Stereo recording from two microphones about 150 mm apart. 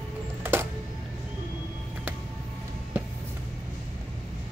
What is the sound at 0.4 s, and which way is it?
Music, 15° right (ahead or behind).